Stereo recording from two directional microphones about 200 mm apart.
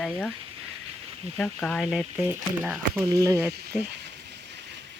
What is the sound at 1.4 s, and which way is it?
Speech, 5° left (ahead or behind).